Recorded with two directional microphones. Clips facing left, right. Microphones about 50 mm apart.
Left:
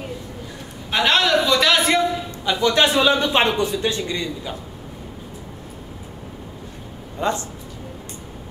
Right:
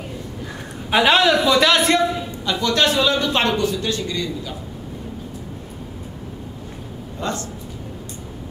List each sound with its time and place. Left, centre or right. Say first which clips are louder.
0.8 s a sound: right 3 dB; centre
2.4 s speech: left 1 dB; centre
7.2 s speech: left 3 dB; left